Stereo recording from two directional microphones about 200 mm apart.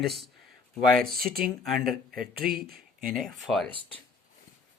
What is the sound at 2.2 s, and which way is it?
Speech, 50° right (ahead or behind).